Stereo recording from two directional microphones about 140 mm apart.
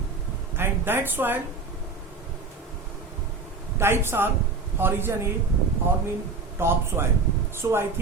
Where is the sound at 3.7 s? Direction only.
15° right (ahead or behind).